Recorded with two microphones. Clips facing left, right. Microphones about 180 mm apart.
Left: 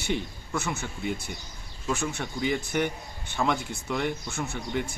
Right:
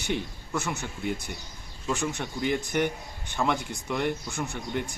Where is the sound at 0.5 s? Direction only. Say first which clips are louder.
Even; centre (ahead or behind).